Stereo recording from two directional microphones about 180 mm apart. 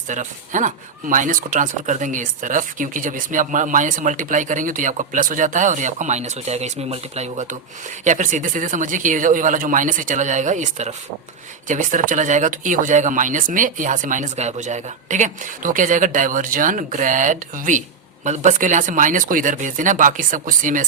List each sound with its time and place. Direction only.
0.1 s speech: 45° right (ahead or behind)